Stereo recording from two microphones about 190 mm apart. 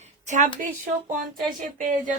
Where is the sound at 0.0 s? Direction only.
40° right (ahead or behind).